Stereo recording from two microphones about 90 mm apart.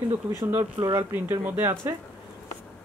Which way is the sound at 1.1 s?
25° right (ahead or behind).